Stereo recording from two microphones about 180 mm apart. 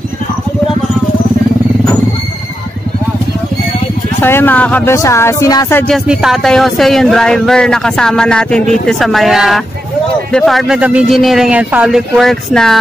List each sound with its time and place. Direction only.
4.2 s speech: 10° left (ahead or behind)
5.9 s speech: centre (ahead or behind)